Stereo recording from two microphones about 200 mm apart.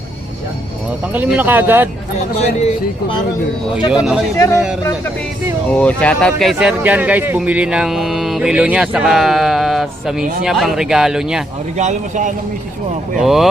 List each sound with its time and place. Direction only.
1.1 s speech: 10° right (ahead or behind)
2.4 s speech: 35° left (ahead or behind)
3.9 s a man's voice: centre (ahead or behind)
5.7 s a man's voice: 5° left (ahead or behind)
11.8 s speech: 35° right (ahead or behind)
13.2 s a man's voice: centre (ahead or behind)